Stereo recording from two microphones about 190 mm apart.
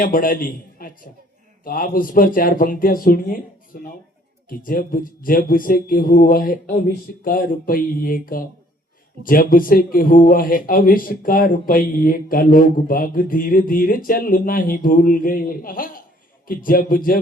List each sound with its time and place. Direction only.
0.0 s a man's voice: 45° left (ahead or behind)